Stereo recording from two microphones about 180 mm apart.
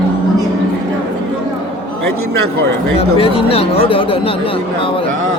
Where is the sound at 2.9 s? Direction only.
30° left (ahead or behind).